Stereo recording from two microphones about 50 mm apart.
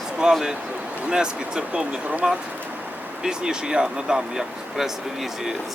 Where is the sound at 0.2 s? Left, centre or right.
Centre.